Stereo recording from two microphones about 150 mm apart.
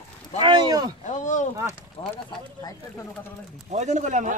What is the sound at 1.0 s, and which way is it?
Speech, 55° left (ahead or behind).